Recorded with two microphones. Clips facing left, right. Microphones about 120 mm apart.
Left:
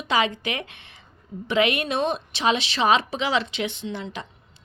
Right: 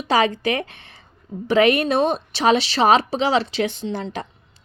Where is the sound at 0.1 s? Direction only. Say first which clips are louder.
Right 5 dB; 40° right (ahead or behind).